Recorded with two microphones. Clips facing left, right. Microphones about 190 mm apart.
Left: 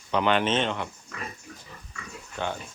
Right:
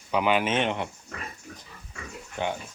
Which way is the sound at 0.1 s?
10° right (ahead or behind).